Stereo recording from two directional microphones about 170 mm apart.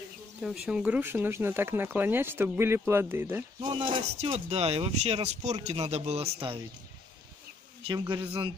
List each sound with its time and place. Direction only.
0.4 s speech: 5° right (ahead or behind)
3.6 s speech: 30° right (ahead or behind)
7.8 s speech: 25° right (ahead or behind)